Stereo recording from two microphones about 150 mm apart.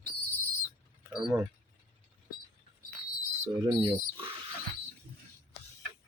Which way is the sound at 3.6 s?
25° right (ahead or behind).